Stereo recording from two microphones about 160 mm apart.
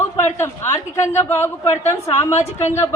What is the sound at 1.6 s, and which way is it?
Speech, 45° left (ahead or behind).